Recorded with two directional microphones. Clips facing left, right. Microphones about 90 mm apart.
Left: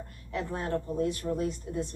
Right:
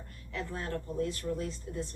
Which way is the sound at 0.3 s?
20° left (ahead or behind).